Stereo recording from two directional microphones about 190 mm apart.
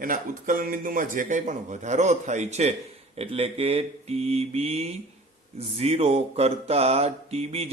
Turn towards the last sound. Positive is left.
turn(degrees=-35)  # may be behind; listen again after turning